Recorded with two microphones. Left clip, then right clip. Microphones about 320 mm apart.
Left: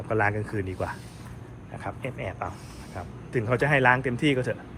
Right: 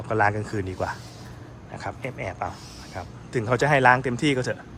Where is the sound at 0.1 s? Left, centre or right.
Centre.